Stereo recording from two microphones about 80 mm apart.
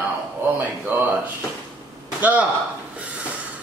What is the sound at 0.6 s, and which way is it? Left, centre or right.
Speech, right.